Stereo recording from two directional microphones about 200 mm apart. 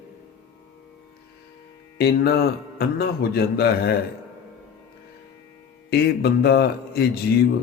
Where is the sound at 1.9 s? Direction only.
55° left (ahead or behind).